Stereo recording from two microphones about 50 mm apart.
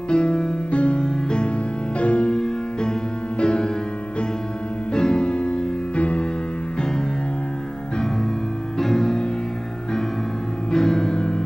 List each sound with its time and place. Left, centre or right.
0.1 s music: centre
4.9 s music: centre
8.7 s music: centre
10.7 s music: centre